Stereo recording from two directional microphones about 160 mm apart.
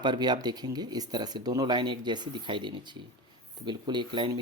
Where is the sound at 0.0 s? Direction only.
30° right (ahead or behind).